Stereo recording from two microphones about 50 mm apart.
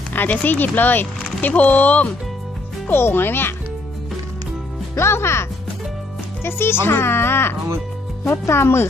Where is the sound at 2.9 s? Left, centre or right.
Left.